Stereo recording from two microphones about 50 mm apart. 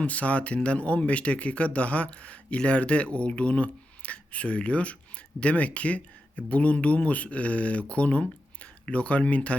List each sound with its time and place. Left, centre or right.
0.0 s speech: left